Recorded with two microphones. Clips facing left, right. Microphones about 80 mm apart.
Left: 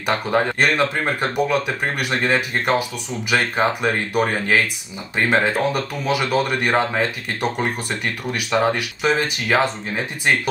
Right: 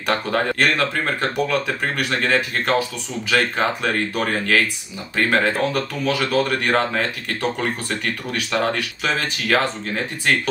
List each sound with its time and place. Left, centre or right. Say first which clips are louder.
0.0 s speech: left 1 dB; centre